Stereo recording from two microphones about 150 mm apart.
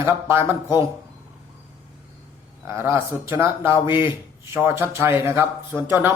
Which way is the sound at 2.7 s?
15° right (ahead or behind).